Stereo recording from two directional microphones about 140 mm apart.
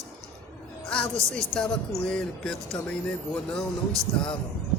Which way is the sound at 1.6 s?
10° left (ahead or behind).